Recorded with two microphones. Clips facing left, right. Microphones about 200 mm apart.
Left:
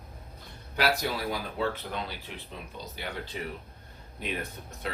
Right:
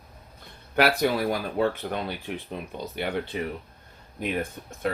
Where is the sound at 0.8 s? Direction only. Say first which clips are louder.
Right 6 dB; 60° right (ahead or behind).